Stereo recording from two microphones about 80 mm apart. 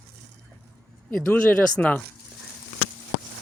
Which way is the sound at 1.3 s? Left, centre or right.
Centre.